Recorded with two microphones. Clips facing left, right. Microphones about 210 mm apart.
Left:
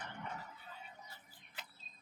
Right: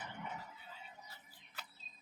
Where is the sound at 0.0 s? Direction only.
5° right (ahead or behind).